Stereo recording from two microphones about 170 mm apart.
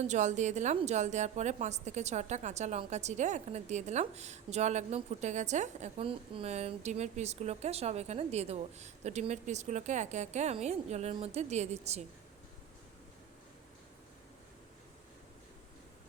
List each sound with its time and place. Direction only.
0.0 s a woman's voice: 45° right (ahead or behind)